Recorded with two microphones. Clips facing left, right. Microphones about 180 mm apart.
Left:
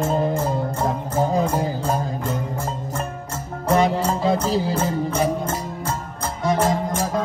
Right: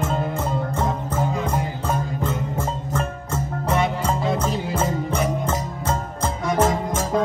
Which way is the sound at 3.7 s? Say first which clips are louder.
Left 4 dB; 35° left (ahead or behind).